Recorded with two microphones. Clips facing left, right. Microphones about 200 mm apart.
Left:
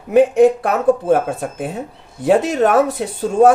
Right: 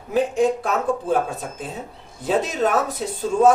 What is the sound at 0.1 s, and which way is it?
Speech, 70° left (ahead or behind).